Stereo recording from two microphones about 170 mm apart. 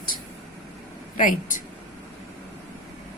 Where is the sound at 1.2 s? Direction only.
50° left (ahead or behind).